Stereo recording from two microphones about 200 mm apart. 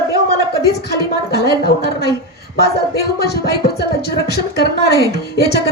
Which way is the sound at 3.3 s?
50° left (ahead or behind).